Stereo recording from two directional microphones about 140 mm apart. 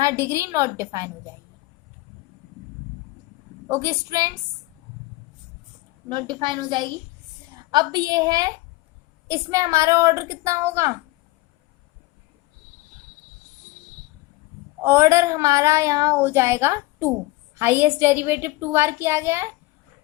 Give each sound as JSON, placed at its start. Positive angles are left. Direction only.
{"t": 0.0, "sound": "speech", "side_deg": -20}
{"t": 3.7, "sound": "speech", "side_deg": -25}
{"t": 6.1, "sound": "a woman's voice", "side_deg": -35}
{"t": 14.8, "sound": "a child's voice", "side_deg": -20}